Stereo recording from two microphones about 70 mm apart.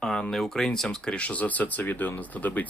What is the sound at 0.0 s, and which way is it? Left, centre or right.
Speech, centre.